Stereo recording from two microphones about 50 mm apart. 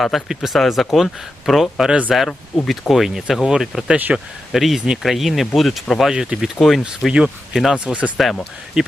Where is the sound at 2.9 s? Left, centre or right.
Centre.